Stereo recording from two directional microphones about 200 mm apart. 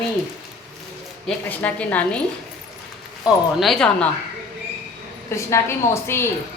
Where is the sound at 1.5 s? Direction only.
10° left (ahead or behind).